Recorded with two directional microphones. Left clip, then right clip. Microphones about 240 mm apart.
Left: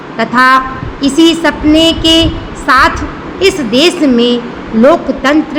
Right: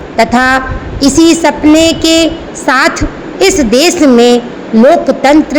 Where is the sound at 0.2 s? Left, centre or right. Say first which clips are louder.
Even; centre.